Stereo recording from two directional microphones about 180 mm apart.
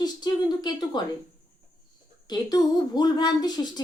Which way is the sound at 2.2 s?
20° left (ahead or behind).